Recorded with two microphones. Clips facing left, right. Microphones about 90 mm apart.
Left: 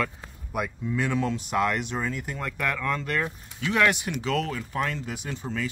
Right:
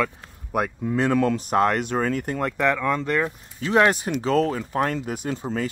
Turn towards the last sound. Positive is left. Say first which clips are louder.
# right 5 dB
turn(degrees=-40)  # may be behind; listen again after turning